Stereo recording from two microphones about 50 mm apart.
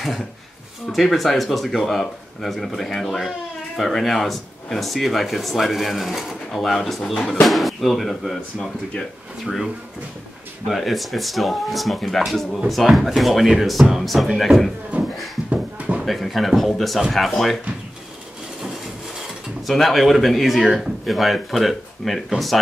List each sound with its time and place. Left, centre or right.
0.8 s speech: centre
10.7 s speech: centre
14.9 s a sound: right
16.1 s speech: centre
19.6 s speech: centre